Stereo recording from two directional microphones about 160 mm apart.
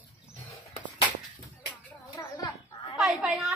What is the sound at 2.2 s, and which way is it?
Chicken, 20° left (ahead or behind).